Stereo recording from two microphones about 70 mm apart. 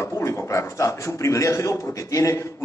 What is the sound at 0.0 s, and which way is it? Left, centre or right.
A man's voice, left.